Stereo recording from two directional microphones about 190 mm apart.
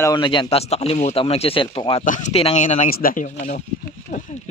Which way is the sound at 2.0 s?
40° left (ahead or behind).